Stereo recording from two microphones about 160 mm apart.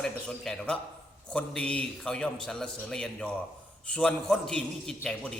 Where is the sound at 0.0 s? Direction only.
5° left (ahead or behind).